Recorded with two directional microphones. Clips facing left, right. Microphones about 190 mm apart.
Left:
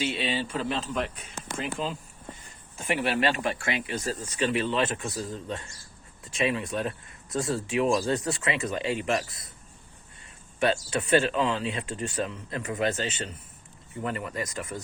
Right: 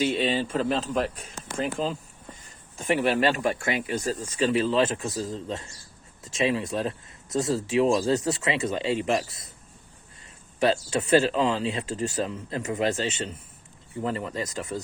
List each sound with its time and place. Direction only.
0.0 s radio: 45° right (ahead or behind)
0.9 s speech: 40° right (ahead or behind)
10.6 s speech: 30° right (ahead or behind)